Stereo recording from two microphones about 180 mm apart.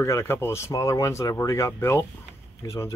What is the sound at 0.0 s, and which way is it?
Speech, 15° left (ahead or behind).